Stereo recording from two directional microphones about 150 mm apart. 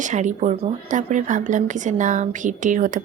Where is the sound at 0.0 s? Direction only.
55° right (ahead or behind).